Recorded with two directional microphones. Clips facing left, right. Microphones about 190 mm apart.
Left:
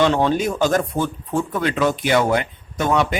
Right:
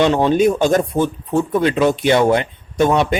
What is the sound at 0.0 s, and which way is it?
Speech, 15° right (ahead or behind).